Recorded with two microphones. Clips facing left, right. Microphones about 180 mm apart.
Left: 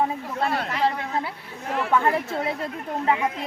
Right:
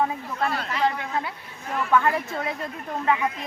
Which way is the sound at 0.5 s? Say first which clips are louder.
Left 3 dB; 55° left (ahead or behind).